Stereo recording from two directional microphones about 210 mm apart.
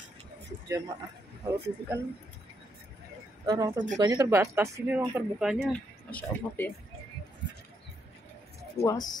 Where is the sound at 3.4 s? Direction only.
20° right (ahead or behind); by 6.7 s 10° left (ahead or behind).